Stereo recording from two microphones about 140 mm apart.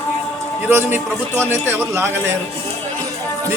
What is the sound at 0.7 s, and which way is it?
Speech, 15° right (ahead or behind).